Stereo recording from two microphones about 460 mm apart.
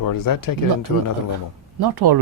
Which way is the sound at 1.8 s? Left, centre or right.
Right.